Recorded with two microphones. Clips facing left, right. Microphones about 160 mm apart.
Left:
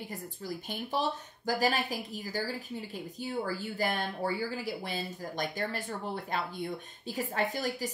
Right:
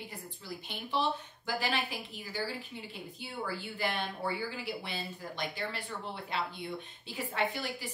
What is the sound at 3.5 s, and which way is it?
Speech, 40° left (ahead or behind).